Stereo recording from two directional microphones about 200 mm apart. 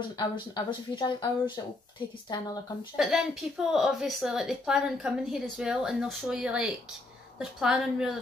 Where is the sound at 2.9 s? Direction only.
Centre (ahead or behind).